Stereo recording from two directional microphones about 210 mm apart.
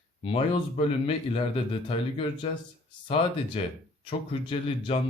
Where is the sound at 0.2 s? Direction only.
25° left (ahead or behind).